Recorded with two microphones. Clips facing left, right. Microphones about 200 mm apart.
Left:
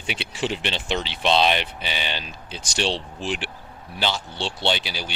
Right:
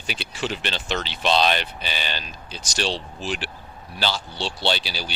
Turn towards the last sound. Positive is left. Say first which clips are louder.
# even
turn(degrees=15)  # may be behind; listen again after turning